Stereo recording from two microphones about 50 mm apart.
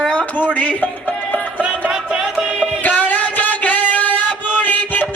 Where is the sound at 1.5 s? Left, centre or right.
Right.